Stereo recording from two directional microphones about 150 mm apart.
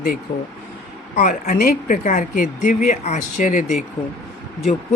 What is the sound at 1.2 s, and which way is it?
Speech, 55° left (ahead or behind).